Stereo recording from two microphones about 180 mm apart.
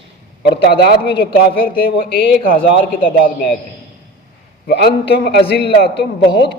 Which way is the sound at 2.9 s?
50° left (ahead or behind).